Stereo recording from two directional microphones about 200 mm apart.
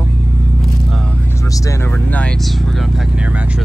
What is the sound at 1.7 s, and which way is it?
Speech, 5° left (ahead or behind).